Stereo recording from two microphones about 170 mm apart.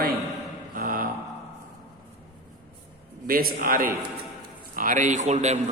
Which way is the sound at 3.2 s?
60° right (ahead or behind).